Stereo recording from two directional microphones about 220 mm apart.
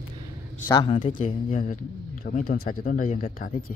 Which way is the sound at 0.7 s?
20° left (ahead or behind).